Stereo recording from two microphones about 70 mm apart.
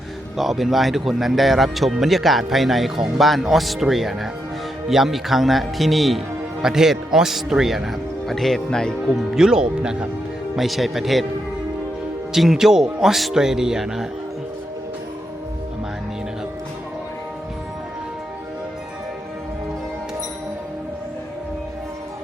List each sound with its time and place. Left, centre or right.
0.3 s speech: centre
9.0 s speech: centre
12.3 s speech: centre